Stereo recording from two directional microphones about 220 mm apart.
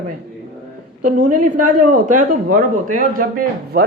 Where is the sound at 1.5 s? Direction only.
35° right (ahead or behind).